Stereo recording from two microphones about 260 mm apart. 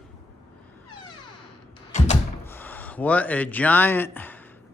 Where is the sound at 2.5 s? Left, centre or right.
Centre.